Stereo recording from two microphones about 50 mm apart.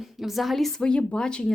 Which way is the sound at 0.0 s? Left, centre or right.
Centre.